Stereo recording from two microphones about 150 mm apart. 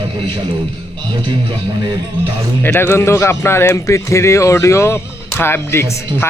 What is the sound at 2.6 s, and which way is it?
Speech, 10° left (ahead or behind).